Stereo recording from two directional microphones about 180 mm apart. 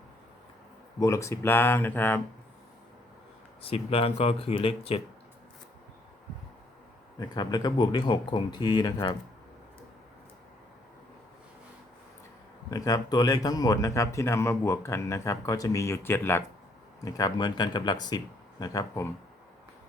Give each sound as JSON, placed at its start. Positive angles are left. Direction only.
{"t": 0.9, "sound": "speech", "side_deg": 15}
{"t": 3.6, "sound": "speech", "side_deg": 30}
{"t": 7.2, "sound": "speech", "side_deg": 20}
{"t": 12.7, "sound": "speech", "side_deg": 20}